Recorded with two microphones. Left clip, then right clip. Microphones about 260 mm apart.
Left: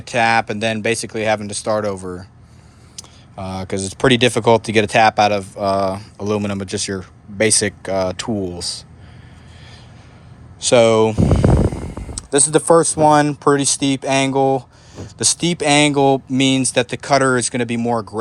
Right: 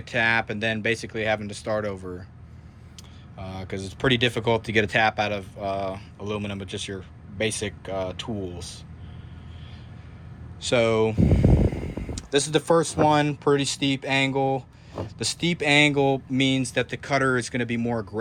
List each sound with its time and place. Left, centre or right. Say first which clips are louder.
0.0 s speech: left 7 dB; centre
6.1 s speech: left 10 dB; left
6.7 s speech: left 9 dB; centre
7.0 s a sound: left 10 dB; left
7.6 s speech: left 10 dB; left
10.6 s speech: left 9 dB; centre
12.3 s speech: left 8 dB; centre